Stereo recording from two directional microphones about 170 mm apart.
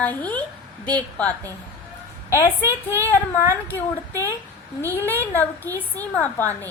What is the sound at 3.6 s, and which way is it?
A woman's voice, 15° left (ahead or behind).